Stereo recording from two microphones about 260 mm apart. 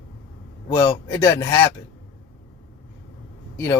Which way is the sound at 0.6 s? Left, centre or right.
Centre.